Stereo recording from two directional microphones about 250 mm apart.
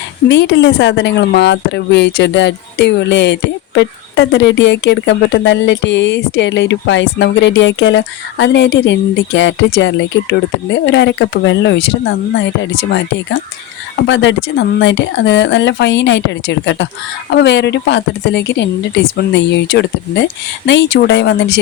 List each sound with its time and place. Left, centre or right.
0.3 s speech: left